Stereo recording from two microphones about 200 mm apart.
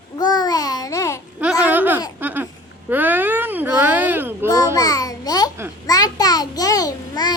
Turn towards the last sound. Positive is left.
turn(degrees=20)  # may be behind; listen again after turning